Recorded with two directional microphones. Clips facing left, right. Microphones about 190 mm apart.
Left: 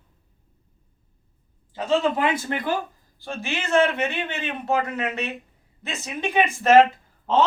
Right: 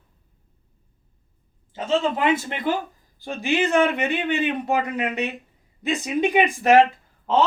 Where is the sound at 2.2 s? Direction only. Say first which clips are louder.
Right 2 dB; 20° right (ahead or behind).